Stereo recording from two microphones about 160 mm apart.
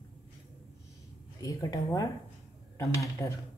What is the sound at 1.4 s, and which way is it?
Speech, 20° left (ahead or behind).